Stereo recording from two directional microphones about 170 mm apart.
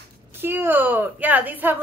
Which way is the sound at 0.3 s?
15° right (ahead or behind).